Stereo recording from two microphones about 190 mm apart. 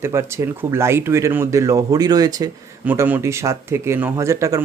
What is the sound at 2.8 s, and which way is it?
Speech, 10° right (ahead or behind).